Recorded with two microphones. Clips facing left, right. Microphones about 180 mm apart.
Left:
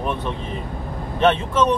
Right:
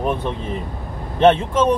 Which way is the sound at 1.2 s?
30° right (ahead or behind).